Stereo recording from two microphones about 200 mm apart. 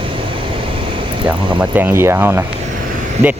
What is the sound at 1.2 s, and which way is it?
Speech, 10° right (ahead or behind).